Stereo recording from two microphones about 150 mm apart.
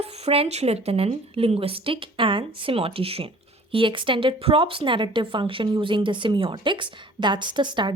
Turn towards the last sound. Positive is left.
turn(degrees=-30)  # may be behind; listen again after turning